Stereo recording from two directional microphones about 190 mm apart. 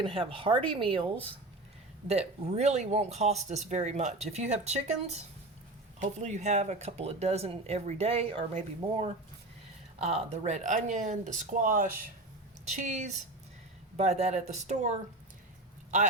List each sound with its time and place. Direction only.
0.0 s speech: 30° right (ahead or behind)